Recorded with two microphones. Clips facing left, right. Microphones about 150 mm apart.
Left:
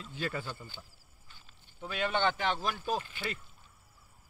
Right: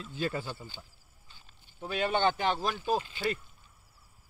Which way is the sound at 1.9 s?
35° right (ahead or behind).